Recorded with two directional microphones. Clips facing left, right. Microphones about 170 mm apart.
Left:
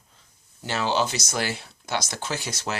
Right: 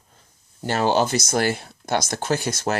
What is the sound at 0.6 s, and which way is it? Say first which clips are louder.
Speech: right 5 dB; 50° right (ahead or behind).